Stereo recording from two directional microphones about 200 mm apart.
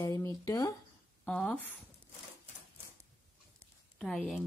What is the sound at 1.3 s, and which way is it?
Speech, 5° left (ahead or behind).